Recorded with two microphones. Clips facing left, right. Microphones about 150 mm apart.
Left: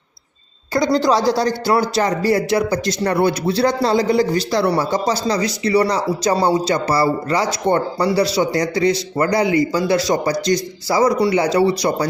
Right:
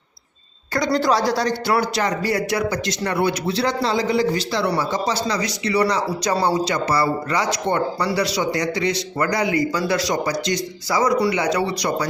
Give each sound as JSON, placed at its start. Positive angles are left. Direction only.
{"t": 0.9, "sound": "speech", "side_deg": 25}